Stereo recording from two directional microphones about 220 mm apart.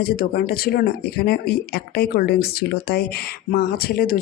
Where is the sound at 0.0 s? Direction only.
45° left (ahead or behind).